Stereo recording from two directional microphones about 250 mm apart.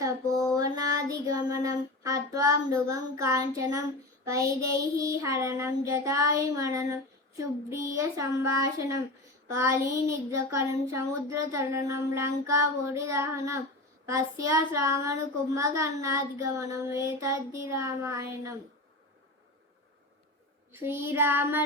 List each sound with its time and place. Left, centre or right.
0.5 s child singing: centre
4.3 s a child's voice: centre
20.7 s a child's voice: centre